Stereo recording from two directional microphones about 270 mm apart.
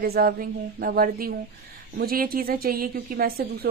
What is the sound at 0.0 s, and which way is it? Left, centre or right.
A woman's voice, right.